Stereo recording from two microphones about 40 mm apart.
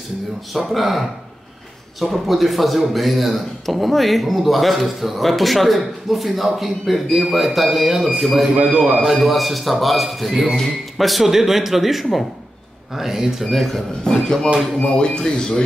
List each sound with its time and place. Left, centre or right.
0.5 s a man's voice: centre
2.0 s a man's voice: centre
8.5 s a man's voice: right
9.2 s a man's voice: centre
14.0 s speech: centre